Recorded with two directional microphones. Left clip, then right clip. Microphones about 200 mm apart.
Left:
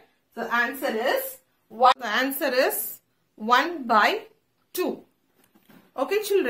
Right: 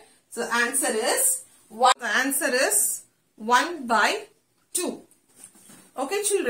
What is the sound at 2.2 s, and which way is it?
Speech, 50° left (ahead or behind).